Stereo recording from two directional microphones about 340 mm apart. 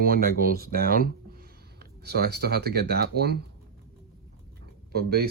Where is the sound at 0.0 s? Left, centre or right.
Right.